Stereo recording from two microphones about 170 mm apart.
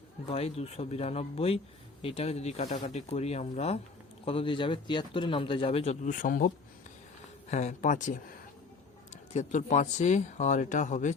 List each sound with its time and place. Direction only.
0.3 s speech: 35° left (ahead or behind); by 6.5 s 50° left (ahead or behind)
7.5 s speech: 45° left (ahead or behind)